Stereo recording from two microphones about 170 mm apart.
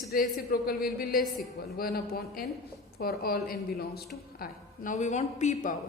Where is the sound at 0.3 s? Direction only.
60° left (ahead or behind); by 5.7 s 45° left (ahead or behind).